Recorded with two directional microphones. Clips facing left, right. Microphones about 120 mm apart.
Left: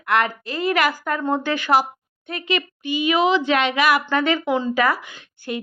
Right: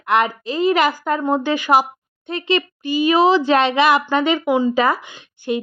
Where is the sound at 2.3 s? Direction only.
30° right (ahead or behind).